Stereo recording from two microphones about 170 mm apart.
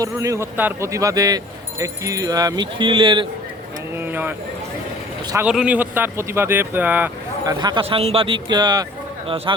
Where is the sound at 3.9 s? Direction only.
10° right (ahead or behind).